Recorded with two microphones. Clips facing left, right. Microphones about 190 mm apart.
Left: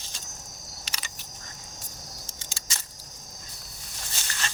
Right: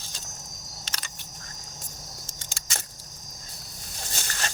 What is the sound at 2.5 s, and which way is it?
Keys jangling, 55° right (ahead or behind).